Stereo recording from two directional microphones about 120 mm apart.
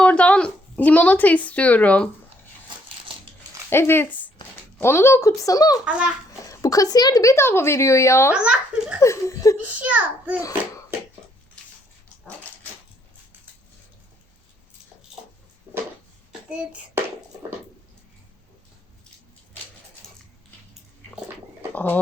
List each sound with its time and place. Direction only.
0.0 s a sound: 10° left (ahead or behind)
3.7 s a woman's voice: 20° left (ahead or behind)
5.8 s a child's voice: 10° right (ahead or behind)
6.4 s a woman's voice: 30° left (ahead or behind)
8.3 s a child's voice: 10° right (ahead or behind)
9.0 s a woman's voice: 25° left (ahead or behind)
9.6 s a child's voice: 10° right (ahead or behind)
16.5 s a sound: 10° right (ahead or behind)
21.7 s speech: 15° left (ahead or behind)